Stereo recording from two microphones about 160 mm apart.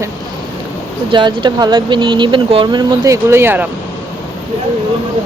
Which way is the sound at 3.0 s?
20° right (ahead or behind).